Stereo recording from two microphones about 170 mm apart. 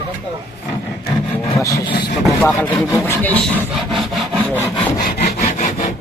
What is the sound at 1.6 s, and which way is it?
Speech, 20° left (ahead or behind).